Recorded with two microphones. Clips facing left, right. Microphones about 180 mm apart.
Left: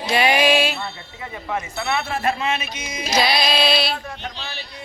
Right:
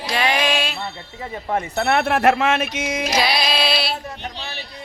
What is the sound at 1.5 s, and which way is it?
Speech, 55° right (ahead or behind).